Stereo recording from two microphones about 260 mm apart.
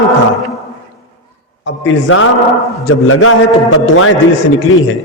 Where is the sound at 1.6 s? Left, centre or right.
Left.